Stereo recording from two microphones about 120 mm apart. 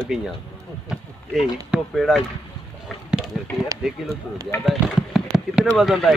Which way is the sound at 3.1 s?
5° right (ahead or behind).